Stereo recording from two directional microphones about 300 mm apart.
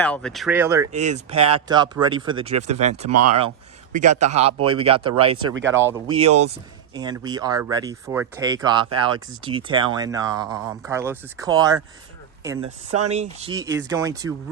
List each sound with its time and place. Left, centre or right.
0.0 s speech: centre
0.9 s speech: right
3.1 s speech: right
4.2 s speech: right
12.9 s speech: right
13.1 s speech: centre